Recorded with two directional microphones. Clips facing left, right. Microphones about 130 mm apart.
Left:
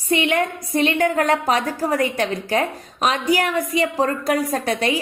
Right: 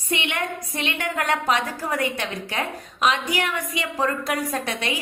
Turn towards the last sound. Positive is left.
turn(degrees=40)  # may be behind; listen again after turning